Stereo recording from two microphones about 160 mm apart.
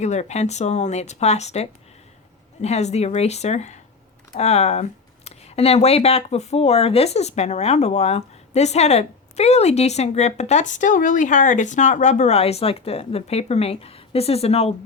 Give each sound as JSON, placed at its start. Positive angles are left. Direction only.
{"t": 0.0, "sound": "speech", "side_deg": 45}